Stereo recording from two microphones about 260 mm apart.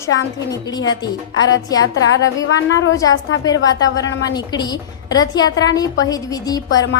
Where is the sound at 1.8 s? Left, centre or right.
Left.